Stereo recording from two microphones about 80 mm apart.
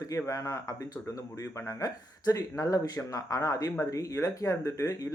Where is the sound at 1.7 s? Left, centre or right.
Left.